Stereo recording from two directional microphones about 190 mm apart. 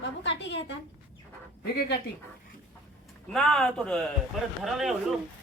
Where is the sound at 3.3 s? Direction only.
Centre (ahead or behind).